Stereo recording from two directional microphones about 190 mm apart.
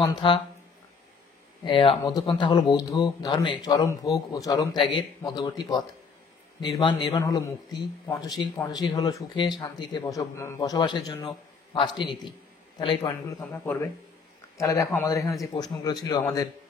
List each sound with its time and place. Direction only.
0.0 s a man's voice: 25° left (ahead or behind)
1.6 s a man's voice: 25° left (ahead or behind)
13.5 s a man's voice: 15° left (ahead or behind)